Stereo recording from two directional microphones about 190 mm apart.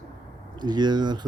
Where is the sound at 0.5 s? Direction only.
20° right (ahead or behind).